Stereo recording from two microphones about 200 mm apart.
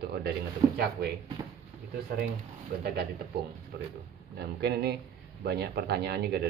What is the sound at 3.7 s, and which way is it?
A man's voice, 55° right (ahead or behind).